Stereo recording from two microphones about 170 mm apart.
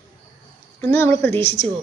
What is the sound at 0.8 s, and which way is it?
Speech, 15° left (ahead or behind).